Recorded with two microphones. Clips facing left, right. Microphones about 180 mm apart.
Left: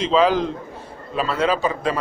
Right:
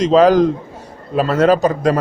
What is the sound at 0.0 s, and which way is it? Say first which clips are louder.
A man's voice: right 7 dB; 45° right (ahead or behind).